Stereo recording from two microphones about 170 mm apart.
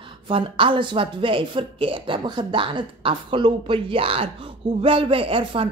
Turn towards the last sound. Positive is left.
turn(degrees=-30)  # may be behind; listen again after turning